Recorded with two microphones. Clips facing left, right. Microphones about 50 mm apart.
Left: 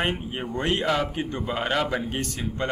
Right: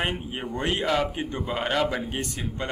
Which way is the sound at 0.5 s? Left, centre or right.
Centre.